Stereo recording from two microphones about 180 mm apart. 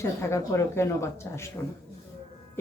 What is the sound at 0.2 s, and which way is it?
Speech, 15° left (ahead or behind).